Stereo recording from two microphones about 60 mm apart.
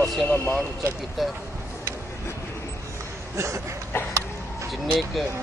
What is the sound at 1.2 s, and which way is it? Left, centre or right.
Speech, centre.